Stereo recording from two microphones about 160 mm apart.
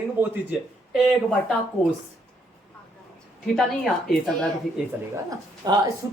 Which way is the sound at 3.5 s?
Centre (ahead or behind).